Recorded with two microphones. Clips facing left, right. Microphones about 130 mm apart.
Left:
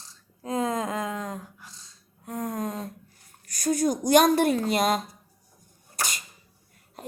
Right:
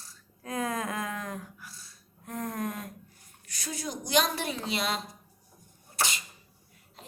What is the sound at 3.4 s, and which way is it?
A woman's voice, 45° left (ahead or behind).